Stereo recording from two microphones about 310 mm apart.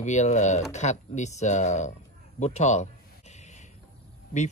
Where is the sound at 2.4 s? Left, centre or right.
Left.